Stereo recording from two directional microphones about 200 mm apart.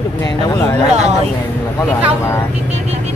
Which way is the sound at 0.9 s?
35° right (ahead or behind).